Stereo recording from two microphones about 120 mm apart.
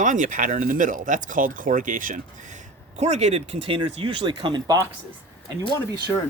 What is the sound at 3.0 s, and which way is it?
Speech, 65° right (ahead or behind).